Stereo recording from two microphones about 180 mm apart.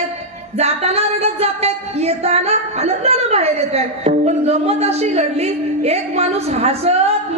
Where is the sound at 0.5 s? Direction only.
35° right (ahead or behind).